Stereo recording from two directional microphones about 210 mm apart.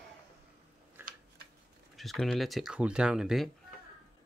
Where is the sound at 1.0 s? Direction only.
10° right (ahead or behind).